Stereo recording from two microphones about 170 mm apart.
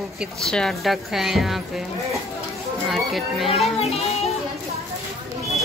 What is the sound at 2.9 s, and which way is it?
Speech, centre (ahead or behind).